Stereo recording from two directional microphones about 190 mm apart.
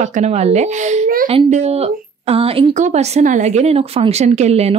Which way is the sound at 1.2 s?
30° right (ahead or behind).